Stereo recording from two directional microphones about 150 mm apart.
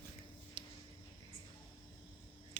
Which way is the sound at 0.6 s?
30° right (ahead or behind).